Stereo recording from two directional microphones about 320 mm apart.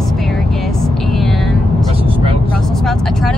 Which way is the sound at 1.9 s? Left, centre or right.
Centre.